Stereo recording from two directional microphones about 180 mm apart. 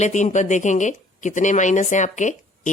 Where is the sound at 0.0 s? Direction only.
40° left (ahead or behind).